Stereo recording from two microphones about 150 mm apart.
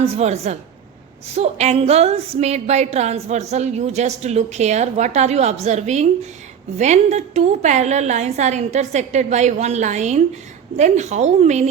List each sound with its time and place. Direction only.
0.0 s a woman's voice: 45° right (ahead or behind)